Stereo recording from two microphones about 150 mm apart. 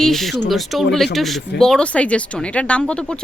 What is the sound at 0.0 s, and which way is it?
Speech, centre (ahead or behind).